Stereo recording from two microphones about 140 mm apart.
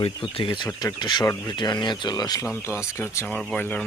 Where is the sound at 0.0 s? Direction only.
40° left (ahead or behind).